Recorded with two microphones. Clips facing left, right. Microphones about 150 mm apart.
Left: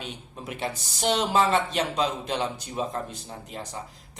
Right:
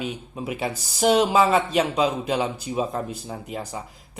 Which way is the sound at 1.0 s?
55° right (ahead or behind).